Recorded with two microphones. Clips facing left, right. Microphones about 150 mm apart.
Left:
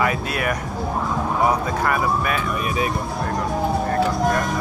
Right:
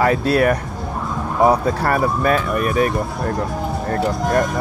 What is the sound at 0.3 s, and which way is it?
Speech, 35° right (ahead or behind).